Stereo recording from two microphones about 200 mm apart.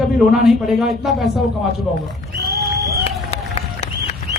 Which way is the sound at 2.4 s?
50° right (ahead or behind).